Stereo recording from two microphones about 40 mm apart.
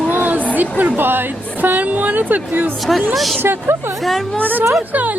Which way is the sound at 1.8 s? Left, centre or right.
Right.